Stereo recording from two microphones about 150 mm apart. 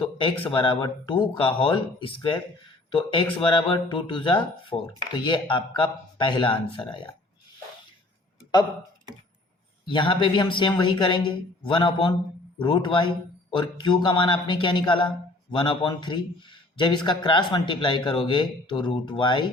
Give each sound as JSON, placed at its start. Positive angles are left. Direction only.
{"t": 0.0, "sound": "a sound", "side_deg": 35}
{"t": 0.5, "sound": "a man's voice", "side_deg": 35}
{"t": 9.8, "sound": "a man's voice", "side_deg": 30}